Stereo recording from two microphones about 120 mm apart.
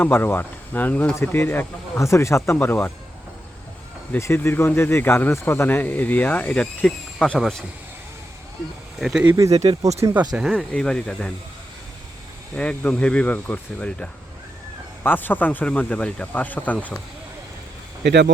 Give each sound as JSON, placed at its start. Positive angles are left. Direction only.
{"t": 0.0, "sound": "speech", "side_deg": 20}
{"t": 4.2, "sound": "speech", "side_deg": 20}
{"t": 9.0, "sound": "speech", "side_deg": 0}
{"t": 9.2, "sound": "speech", "side_deg": -30}
{"t": 9.7, "sound": "speech", "side_deg": -50}
{"t": 10.4, "sound": "speech", "side_deg": 5}
{"t": 12.5, "sound": "speech", "side_deg": 10}